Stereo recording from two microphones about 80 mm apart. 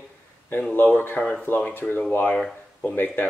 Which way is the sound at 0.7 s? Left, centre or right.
Left.